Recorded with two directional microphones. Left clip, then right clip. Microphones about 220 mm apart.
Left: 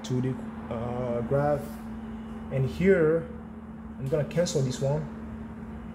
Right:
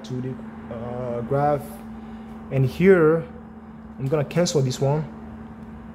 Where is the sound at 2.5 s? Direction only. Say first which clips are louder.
Right 7 dB; 35° right (ahead or behind).